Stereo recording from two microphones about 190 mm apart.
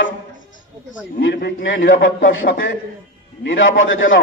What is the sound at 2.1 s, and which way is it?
Speech, 50° left (ahead or behind).